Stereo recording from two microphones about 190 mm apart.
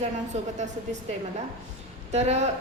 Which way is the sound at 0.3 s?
35° right (ahead or behind).